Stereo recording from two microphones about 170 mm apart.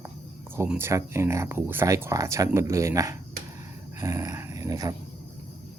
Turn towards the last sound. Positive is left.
turn(degrees=-20)  # may be behind; listen again after turning